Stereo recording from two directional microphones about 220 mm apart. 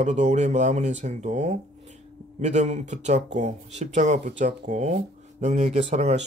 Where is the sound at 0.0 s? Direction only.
30° right (ahead or behind).